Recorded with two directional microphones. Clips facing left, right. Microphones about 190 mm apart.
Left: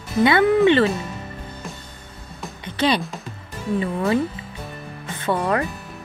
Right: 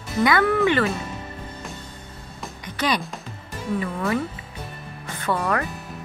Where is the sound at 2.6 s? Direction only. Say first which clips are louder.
Left 4 dB; 25° left (ahead or behind).